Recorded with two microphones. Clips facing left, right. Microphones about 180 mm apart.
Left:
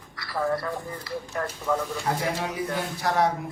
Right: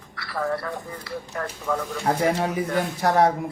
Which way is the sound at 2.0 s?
50° right (ahead or behind).